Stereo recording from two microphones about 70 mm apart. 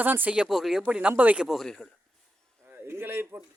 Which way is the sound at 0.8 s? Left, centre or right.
Centre.